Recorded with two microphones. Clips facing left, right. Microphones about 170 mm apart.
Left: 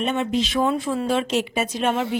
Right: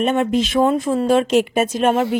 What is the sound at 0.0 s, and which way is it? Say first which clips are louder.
Speech: right 5 dB; 50° right (ahead or behind).